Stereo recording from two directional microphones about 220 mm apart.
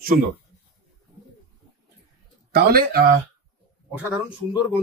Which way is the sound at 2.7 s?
45° right (ahead or behind).